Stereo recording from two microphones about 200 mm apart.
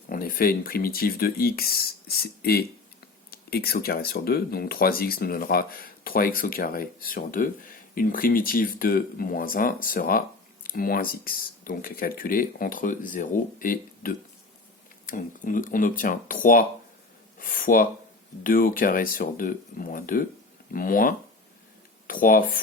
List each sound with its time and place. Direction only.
0.1 s speech: 45° left (ahead or behind)